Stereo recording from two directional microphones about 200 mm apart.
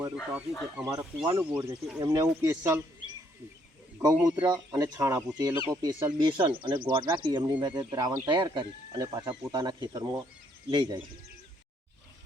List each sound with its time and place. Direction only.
0.2 s speech: 5° right (ahead or behind)
1.5 s speech: 5° right (ahead or behind)
2.0 s speech: 15° right (ahead or behind)
4.0 s speech: 20° right (ahead or behind)